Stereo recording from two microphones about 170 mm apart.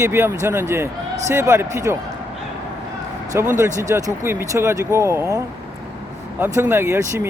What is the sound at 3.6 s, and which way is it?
Speech, 15° right (ahead or behind).